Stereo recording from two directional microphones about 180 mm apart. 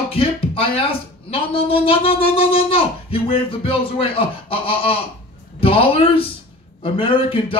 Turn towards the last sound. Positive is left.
turn(degrees=30)  # may be behind; listen again after turning